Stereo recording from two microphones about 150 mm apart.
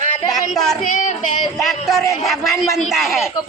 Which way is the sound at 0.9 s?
55° left (ahead or behind).